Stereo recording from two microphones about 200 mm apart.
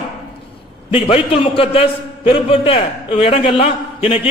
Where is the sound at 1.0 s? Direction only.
30° left (ahead or behind).